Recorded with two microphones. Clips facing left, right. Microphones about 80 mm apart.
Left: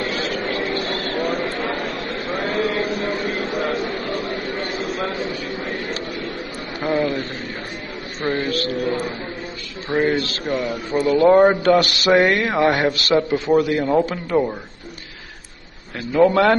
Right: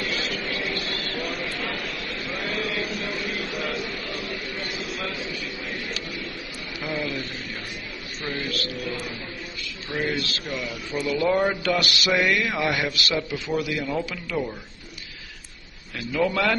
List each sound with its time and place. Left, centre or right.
0.0 s vehicle: left
0.7 s a sound: left
6.9 s a man's voice: left
16.1 s speech: left